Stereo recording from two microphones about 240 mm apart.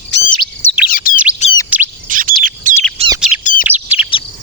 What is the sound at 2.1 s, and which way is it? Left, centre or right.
Chirp, right.